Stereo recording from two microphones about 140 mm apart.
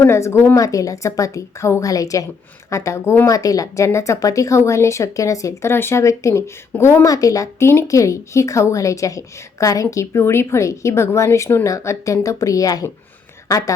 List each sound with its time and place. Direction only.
0.0 s a woman's voice: 20° left (ahead or behind)